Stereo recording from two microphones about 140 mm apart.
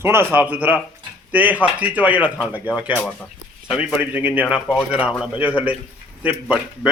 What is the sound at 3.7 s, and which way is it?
Speech, 10° right (ahead or behind).